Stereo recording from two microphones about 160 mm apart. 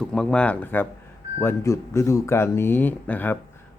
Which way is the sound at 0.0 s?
5° left (ahead or behind).